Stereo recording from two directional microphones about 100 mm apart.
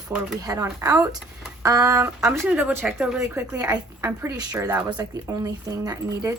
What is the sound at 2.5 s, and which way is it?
Speech, 10° right (ahead or behind).